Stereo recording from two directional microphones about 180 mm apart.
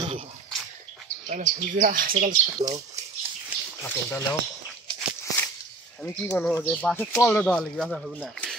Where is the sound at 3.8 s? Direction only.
10° left (ahead or behind).